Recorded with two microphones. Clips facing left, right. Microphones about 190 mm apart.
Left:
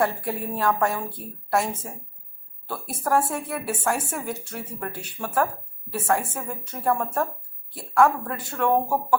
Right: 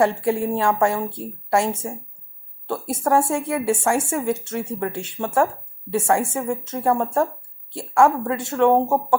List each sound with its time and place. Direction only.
0.0 s a woman's voice: 25° right (ahead or behind)